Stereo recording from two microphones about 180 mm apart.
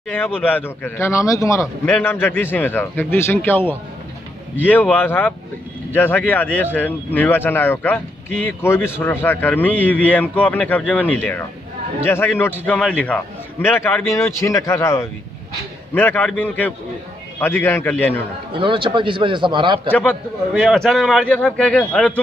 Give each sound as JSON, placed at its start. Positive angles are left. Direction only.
{"t": 0.1, "sound": "a man's voice", "side_deg": 10}
{"t": 18.5, "sound": "a man's voice", "side_deg": -25}
{"t": 19.9, "sound": "a man's voice", "side_deg": 5}